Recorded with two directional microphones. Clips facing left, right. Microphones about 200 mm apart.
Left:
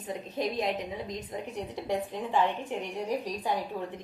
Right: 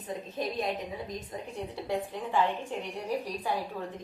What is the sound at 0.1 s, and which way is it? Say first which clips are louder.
A woman's voice: left 2 dB; 20° left (ahead or behind).